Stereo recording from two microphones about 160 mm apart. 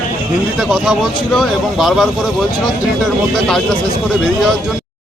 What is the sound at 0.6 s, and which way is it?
Speech, centre (ahead or behind).